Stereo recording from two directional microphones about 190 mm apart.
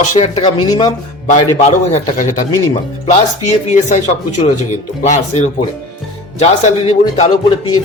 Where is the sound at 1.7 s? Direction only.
40° left (ahead or behind).